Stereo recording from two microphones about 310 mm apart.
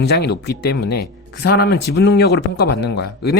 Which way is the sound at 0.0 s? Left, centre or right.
Left.